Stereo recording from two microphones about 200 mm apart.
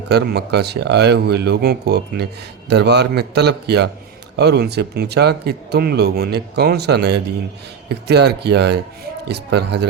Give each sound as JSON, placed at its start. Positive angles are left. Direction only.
{"t": 0.1, "sound": "speech", "side_deg": -55}